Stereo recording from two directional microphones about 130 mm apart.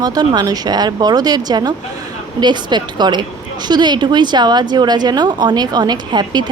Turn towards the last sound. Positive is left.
turn(degrees=-35)  # may be behind; listen again after turning